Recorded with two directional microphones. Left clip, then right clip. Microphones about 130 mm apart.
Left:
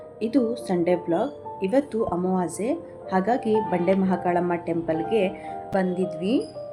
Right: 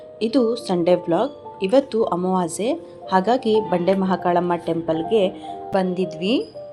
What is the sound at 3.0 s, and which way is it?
Speech, 25° right (ahead or behind).